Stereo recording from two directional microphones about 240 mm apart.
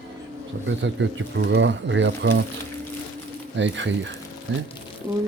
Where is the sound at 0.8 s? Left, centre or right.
Right.